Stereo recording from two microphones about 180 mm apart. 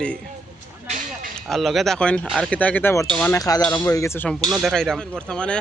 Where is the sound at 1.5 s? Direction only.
Centre (ahead or behind).